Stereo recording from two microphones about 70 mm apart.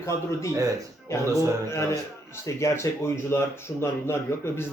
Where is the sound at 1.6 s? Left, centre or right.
Left.